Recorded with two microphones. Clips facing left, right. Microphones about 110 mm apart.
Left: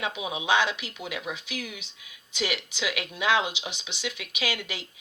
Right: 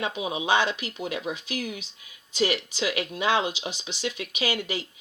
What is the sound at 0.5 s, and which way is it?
Speech, 40° right (ahead or behind).